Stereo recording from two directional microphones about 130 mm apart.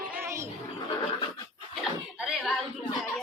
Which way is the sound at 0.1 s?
20° right (ahead or behind).